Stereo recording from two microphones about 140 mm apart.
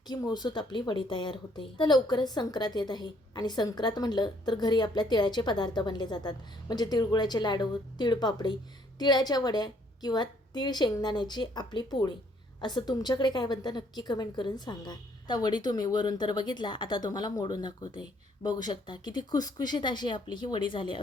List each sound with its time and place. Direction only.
0.1 s a woman's voice: 30° left (ahead or behind)